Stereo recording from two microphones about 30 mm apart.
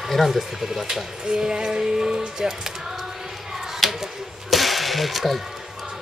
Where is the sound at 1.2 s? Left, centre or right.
Right.